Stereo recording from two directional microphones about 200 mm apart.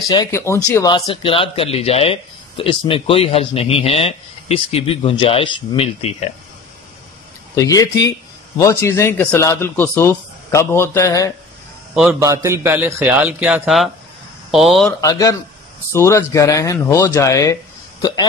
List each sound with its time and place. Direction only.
0.1 s a man's voice: 15° left (ahead or behind)
7.5 s a man's voice: 15° left (ahead or behind)
11.9 s a man's voice: centre (ahead or behind)
12.2 s a man's voice: 15° right (ahead or behind)
14.9 s a man's voice: 15° left (ahead or behind)